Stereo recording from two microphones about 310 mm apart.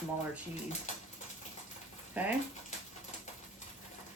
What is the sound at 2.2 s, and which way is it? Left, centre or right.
Speech, centre.